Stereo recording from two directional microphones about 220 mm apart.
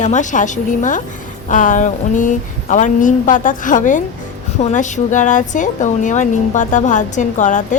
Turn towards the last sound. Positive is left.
turn(degrees=35)  # may be behind; listen again after turning